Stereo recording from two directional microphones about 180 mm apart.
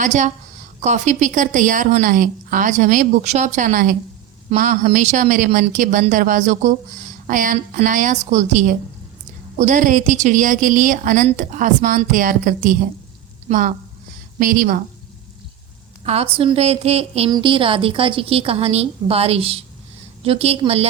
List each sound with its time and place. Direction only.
0.0 s a woman's voice: 40° right (ahead or behind)
16.0 s a woman's voice: 35° right (ahead or behind)